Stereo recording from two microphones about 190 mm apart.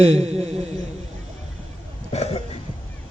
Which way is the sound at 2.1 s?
30° left (ahead or behind).